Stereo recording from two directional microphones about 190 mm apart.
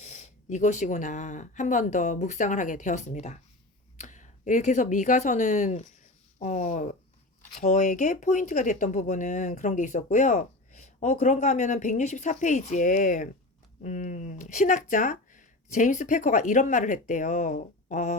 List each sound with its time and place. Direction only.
0.0 s speech: 40° left (ahead or behind)